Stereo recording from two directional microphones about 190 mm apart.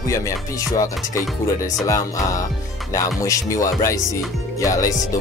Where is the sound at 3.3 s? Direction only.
15° left (ahead or behind).